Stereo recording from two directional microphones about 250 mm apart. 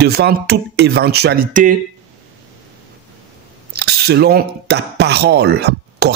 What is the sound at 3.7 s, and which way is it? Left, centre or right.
Speech, right.